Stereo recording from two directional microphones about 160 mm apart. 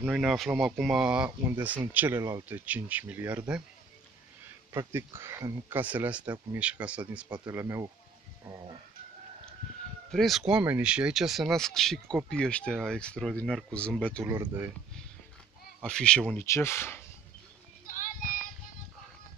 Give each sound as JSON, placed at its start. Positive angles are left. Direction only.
{"t": 0.0, "sound": "speech", "side_deg": -5}
{"t": 4.7, "sound": "speech", "side_deg": -15}
{"t": 7.3, "sound": "speech", "side_deg": -20}
{"t": 10.1, "sound": "speech", "side_deg": 0}
{"t": 15.8, "sound": "speech", "side_deg": 5}
{"t": 16.4, "sound": "speech", "side_deg": 15}
{"t": 17.8, "sound": "child singing", "side_deg": 55}